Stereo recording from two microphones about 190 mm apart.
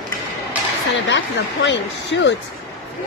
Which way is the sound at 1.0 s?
70° left (ahead or behind).